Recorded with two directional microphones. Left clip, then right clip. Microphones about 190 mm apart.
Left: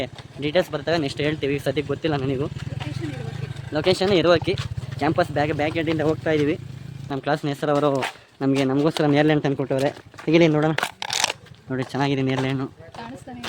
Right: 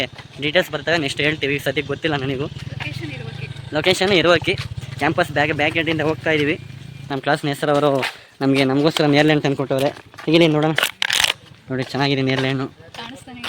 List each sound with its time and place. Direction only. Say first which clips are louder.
0.0 s speech: right 4 dB; 5° right (ahead or behind)
7.1 s speech: right 4 dB; 25° right (ahead or behind)
10.8 s crumpling: right 6 dB; 5° left (ahead or behind)
11.7 s speech: right 4 dB; 20° right (ahead or behind)